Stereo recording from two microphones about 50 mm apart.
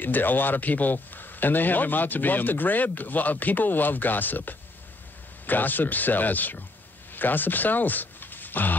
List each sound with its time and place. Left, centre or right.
0.0 s speech: left